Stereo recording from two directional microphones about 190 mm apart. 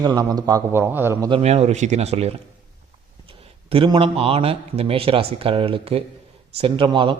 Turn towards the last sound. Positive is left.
turn(degrees=-25)  # may be behind; listen again after turning